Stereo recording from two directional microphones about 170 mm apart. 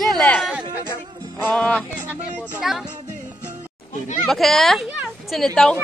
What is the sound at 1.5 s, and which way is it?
A woman's voice, 5° left (ahead or behind).